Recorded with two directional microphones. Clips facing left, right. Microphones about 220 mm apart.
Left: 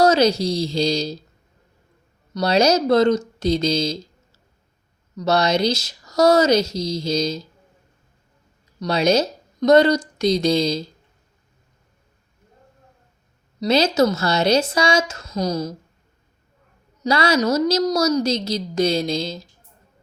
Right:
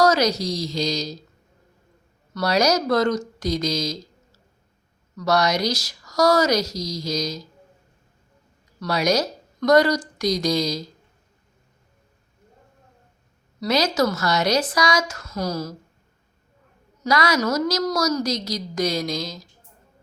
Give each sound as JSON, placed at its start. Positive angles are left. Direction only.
{"t": 0.0, "sound": "a woman's voice", "side_deg": 25}
{"t": 2.3, "sound": "a woman's voice", "side_deg": 25}
{"t": 5.1, "sound": "a woman's voice", "side_deg": 25}
{"t": 8.8, "sound": "speech", "side_deg": 25}
{"t": 13.6, "sound": "a woman's voice", "side_deg": 25}
{"t": 17.0, "sound": "a woman's voice", "side_deg": 30}